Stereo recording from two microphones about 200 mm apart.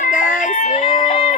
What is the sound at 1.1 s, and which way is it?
Music, 30° left (ahead or behind).